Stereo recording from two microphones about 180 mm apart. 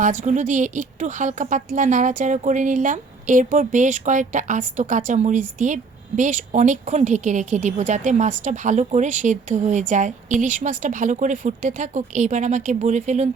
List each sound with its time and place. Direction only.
0.0 s speech: 45° right (ahead or behind)